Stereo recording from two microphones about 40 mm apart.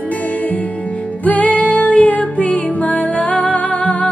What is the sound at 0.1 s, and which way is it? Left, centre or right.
Music, left.